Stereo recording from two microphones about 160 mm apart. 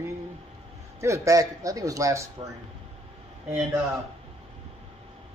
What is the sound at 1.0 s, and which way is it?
Speech, 20° right (ahead or behind).